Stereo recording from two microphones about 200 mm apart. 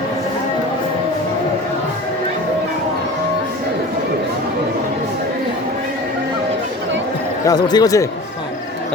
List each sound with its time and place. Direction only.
7.4 s a man's voice: 20° left (ahead or behind)